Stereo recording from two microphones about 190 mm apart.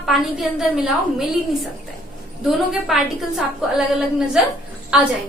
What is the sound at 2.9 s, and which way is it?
Speech, centre (ahead or behind).